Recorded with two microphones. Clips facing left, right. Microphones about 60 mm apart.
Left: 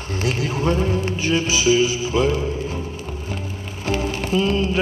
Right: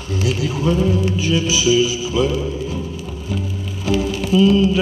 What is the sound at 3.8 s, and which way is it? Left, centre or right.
Music, left.